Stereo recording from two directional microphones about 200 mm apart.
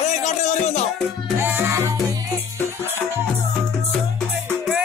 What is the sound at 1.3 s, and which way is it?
Music, 10° right (ahead or behind).